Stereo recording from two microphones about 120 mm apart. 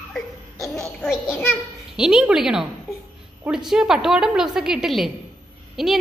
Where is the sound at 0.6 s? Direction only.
5° left (ahead or behind).